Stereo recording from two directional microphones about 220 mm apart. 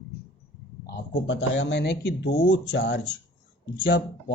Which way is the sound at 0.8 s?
55° left (ahead or behind).